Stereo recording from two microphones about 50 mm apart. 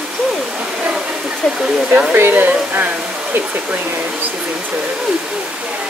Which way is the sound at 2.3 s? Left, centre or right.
Right.